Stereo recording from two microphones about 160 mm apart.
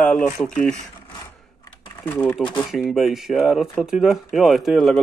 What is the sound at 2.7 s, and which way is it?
Speech, centre (ahead or behind).